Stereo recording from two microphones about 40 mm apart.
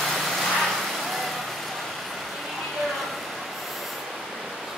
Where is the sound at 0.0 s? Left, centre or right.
Centre.